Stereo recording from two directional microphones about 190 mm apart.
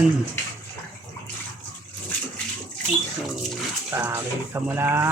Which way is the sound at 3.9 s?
10° right (ahead or behind).